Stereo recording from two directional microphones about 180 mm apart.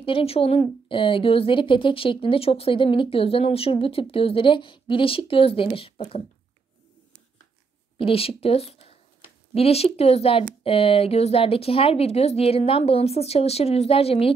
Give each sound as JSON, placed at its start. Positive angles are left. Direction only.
{"t": 0.0, "sound": "speech", "side_deg": 30}
{"t": 8.0, "sound": "speech", "side_deg": 30}